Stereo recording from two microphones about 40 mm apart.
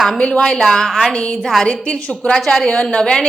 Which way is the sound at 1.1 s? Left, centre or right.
Left.